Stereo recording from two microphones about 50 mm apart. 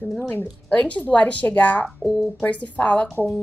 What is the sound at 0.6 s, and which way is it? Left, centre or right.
A woman's voice, left.